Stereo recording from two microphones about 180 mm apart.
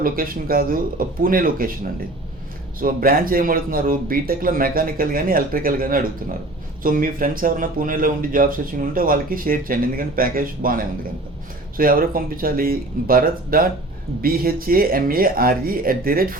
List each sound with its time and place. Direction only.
0.0 s speech: 50° right (ahead or behind)